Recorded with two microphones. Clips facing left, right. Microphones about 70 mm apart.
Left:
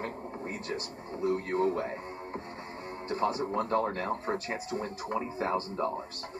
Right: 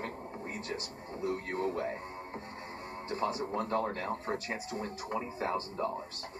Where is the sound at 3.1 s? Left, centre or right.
Left.